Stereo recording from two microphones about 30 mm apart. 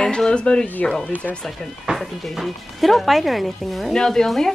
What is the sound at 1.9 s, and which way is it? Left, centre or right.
Music, right.